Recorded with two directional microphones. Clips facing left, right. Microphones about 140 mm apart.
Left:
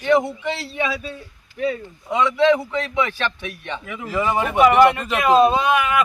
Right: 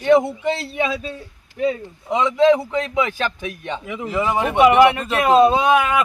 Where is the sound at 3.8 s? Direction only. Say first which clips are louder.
Right 4 dB; 25° right (ahead or behind).